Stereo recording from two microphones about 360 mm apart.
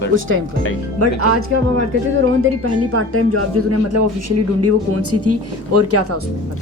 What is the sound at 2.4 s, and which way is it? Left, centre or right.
Speech, right.